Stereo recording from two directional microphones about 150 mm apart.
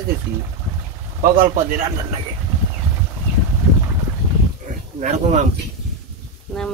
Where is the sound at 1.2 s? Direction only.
70° right (ahead or behind).